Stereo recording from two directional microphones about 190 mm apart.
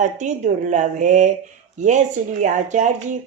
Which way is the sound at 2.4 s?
40° right (ahead or behind).